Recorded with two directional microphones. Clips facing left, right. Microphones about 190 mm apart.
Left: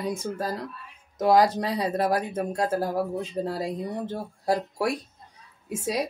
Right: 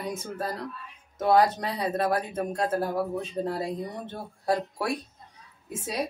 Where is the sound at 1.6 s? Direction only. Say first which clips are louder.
Left 2 dB; 30° left (ahead or behind).